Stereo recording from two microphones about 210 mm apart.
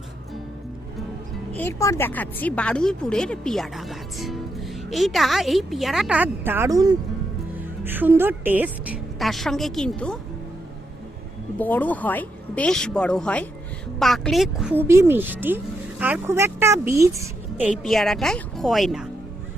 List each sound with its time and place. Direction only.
1.5 s a woman's voice: 10° left (ahead or behind)
11.5 s speech: 10° left (ahead or behind)